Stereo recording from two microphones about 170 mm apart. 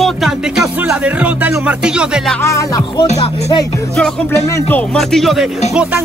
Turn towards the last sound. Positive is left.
turn(degrees=0)  # may be behind; listen again after turning